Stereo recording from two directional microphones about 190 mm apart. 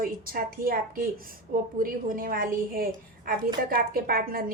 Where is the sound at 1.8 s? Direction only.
50° right (ahead or behind).